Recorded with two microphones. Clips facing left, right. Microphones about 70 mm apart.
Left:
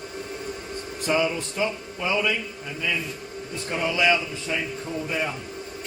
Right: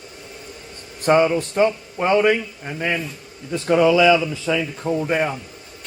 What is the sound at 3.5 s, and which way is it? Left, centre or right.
Speech, right.